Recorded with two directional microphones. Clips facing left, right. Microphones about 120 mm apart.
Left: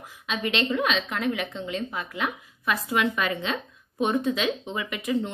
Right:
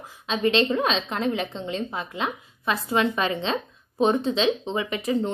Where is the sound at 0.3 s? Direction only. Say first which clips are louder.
Right 5 dB; 30° right (ahead or behind).